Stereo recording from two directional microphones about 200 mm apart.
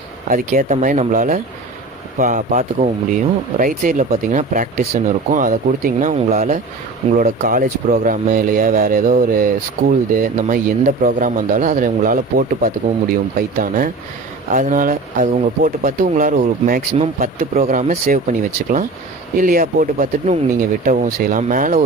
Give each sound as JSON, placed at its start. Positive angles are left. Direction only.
{"t": 0.3, "sound": "speech", "side_deg": -40}
{"t": 17.0, "sound": "speech", "side_deg": -30}